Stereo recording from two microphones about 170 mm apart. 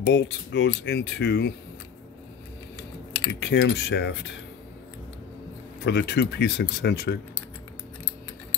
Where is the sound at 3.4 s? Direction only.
90° left.